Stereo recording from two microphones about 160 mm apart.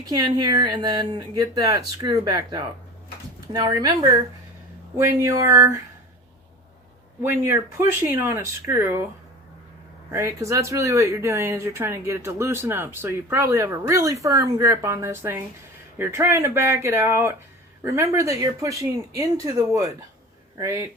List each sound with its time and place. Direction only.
0.0 s speech: 25° right (ahead or behind)
7.2 s speech: 15° right (ahead or behind)
10.1 s speech: 20° right (ahead or behind)